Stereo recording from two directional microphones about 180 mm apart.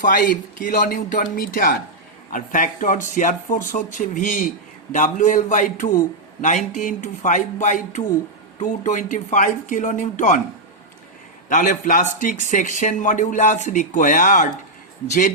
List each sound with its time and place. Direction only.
0.0 s a man's voice: 50° left (ahead or behind)
11.4 s a man's voice: 45° left (ahead or behind)